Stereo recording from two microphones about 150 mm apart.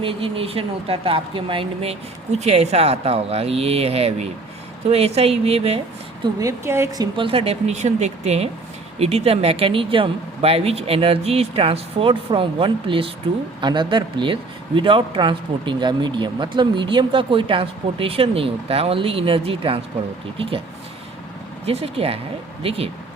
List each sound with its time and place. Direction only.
0.0 s speech: 35° right (ahead or behind)
6.4 s speech: 15° right (ahead or behind); by 19.8 s 40° right (ahead or behind)
21.7 s speech: 40° right (ahead or behind)